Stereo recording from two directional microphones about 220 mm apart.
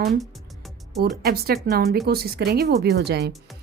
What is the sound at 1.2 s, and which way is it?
Speech, 45° right (ahead or behind).